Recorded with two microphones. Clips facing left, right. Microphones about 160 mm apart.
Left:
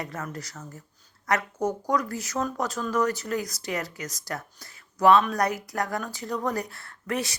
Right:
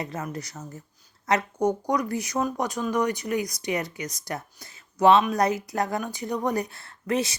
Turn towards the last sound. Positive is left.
turn(degrees=-25)  # may be behind; listen again after turning